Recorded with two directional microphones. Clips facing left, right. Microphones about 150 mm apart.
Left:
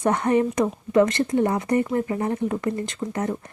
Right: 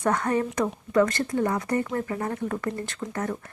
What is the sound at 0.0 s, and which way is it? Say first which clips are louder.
Speech: left 4 dB; 25° left (ahead or behind).